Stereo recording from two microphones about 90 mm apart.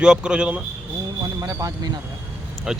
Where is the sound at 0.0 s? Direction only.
10° right (ahead or behind).